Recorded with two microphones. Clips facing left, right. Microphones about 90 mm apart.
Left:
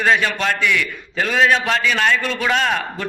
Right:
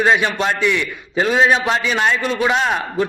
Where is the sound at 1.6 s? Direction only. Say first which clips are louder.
Right 1 dB; 20° right (ahead or behind).